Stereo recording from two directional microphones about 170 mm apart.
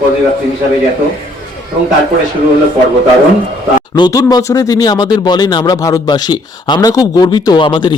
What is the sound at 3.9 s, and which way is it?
Speech, 25° left (ahead or behind).